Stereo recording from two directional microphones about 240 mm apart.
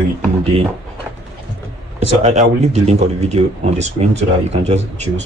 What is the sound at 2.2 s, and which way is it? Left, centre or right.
Speech, right.